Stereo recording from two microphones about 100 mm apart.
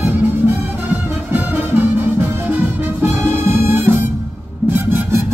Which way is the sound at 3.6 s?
20° right (ahead or behind).